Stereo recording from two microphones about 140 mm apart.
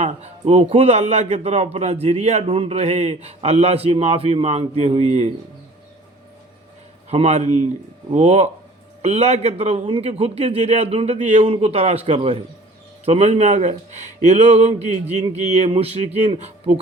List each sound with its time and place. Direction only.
0.0 s a man's voice: 50° right (ahead or behind)
7.1 s a man's voice: 50° right (ahead or behind)